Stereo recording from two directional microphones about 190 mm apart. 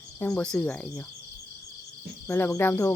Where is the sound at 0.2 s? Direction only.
5° left (ahead or behind).